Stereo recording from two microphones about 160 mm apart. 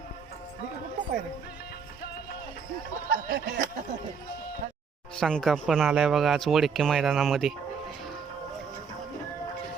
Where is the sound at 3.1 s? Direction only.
75° right (ahead or behind).